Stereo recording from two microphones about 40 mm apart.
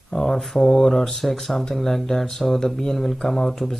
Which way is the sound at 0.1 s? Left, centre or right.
Centre.